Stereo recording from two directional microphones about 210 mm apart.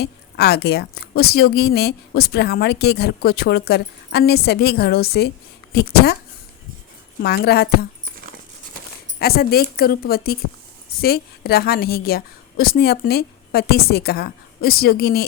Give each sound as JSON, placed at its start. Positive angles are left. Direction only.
{"t": 0.0, "sound": "a woman's voice", "side_deg": 50}
{"t": 7.2, "sound": "a woman's voice", "side_deg": 50}
{"t": 9.1, "sound": "a woman's voice", "side_deg": 45}